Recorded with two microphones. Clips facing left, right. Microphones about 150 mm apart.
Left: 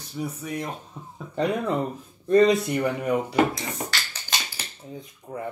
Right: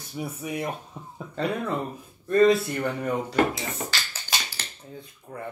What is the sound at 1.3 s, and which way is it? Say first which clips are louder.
Speech: left 3 dB; 15° left (ahead or behind).